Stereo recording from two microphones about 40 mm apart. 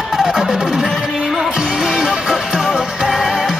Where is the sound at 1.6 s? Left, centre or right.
Centre.